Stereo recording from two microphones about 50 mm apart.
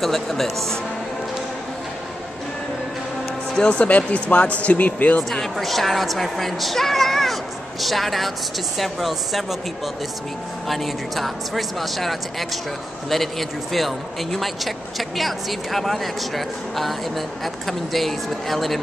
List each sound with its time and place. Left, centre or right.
0.0 s speech: centre
3.5 s speech: left
5.6 s speech: centre
10.7 s speech: centre